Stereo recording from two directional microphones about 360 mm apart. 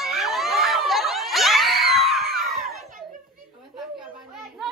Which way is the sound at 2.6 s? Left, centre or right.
Right.